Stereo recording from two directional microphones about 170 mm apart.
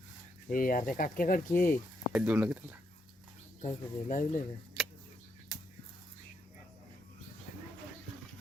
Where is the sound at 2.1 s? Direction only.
10° right (ahead or behind).